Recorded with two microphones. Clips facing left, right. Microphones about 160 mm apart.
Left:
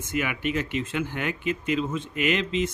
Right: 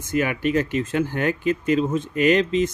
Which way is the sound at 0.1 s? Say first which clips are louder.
Right 6 dB; 40° right (ahead or behind).